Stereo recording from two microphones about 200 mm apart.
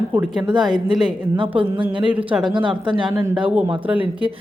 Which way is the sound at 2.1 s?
5° right (ahead or behind).